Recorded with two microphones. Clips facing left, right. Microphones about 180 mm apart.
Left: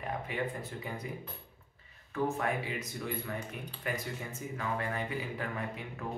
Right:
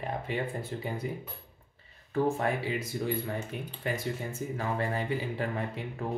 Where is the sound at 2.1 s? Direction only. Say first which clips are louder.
Right 4 dB; 30° right (ahead or behind).